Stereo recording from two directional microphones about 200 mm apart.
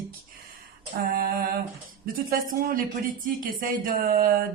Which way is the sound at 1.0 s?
50° right (ahead or behind).